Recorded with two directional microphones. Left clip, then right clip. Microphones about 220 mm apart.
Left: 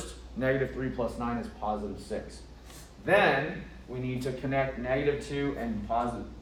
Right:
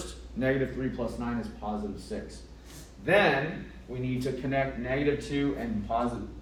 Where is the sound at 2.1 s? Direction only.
20° left (ahead or behind); by 6.1 s 5° left (ahead or behind).